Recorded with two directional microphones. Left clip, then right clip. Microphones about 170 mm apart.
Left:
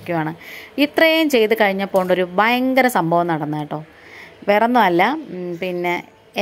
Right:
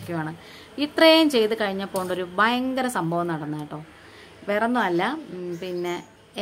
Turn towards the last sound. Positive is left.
turn(degrees=30)  # may be behind; listen again after turning